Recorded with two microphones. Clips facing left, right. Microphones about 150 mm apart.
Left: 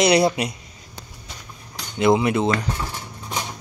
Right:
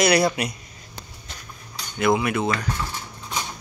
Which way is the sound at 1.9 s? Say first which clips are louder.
Left 3 dB; 25° left (ahead or behind).